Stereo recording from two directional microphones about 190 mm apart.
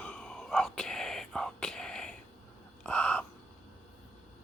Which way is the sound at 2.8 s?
5° left (ahead or behind).